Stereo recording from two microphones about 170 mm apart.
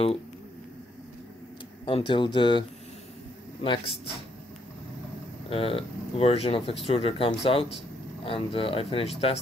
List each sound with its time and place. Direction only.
1.9 s speech: 30° left (ahead or behind)
3.6 s speech: 30° left (ahead or behind)
5.5 s speech: 35° left (ahead or behind)